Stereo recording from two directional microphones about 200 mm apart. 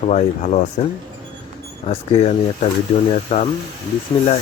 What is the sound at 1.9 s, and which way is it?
Speech, 35° left (ahead or behind).